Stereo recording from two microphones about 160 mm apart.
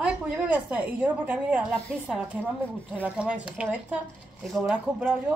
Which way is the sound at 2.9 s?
10° right (ahead or behind).